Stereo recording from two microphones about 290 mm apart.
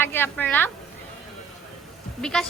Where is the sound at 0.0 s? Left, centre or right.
Centre.